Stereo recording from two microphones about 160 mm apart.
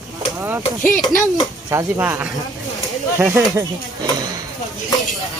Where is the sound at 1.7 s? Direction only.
15° right (ahead or behind).